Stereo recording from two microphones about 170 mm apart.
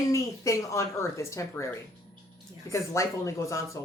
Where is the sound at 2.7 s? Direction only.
20° left (ahead or behind).